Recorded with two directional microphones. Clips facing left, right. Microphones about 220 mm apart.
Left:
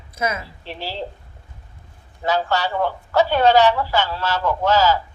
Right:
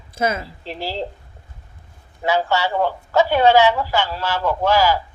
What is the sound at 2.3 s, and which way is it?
A man's voice, 15° right (ahead or behind).